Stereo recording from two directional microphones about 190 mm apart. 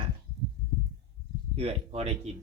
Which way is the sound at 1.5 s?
30° right (ahead or behind).